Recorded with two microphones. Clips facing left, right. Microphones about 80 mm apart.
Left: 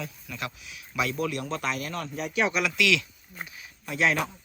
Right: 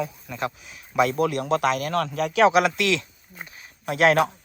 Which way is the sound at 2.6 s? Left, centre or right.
Right.